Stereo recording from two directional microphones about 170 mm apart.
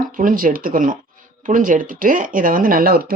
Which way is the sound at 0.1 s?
55° right (ahead or behind).